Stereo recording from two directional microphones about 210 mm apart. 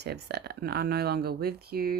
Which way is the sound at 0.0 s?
50° right (ahead or behind).